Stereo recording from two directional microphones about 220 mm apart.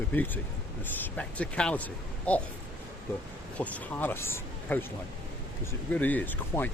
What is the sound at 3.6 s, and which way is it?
Speech, 10° left (ahead or behind).